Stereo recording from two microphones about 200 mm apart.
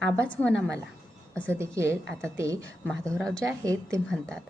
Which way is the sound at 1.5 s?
15° right (ahead or behind).